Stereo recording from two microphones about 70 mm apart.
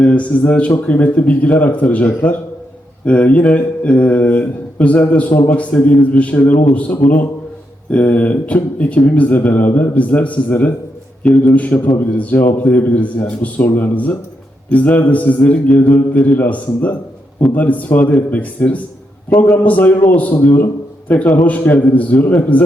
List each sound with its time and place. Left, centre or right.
0.0 s speech: centre
3.1 s speech: centre
6.7 s speech: centre